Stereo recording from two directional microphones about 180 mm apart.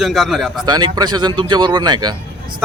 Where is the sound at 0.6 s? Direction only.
20° right (ahead or behind).